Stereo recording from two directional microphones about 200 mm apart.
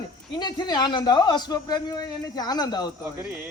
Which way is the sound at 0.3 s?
20° left (ahead or behind).